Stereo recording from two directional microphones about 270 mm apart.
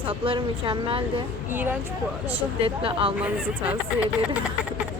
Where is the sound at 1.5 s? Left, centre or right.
Centre.